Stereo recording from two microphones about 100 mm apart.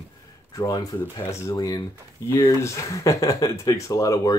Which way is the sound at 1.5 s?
35° left (ahead or behind).